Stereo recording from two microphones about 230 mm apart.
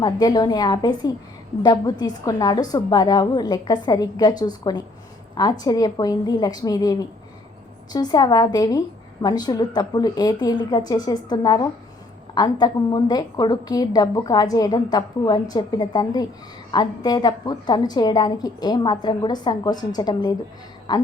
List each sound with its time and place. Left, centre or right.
0.0 s a woman's voice: centre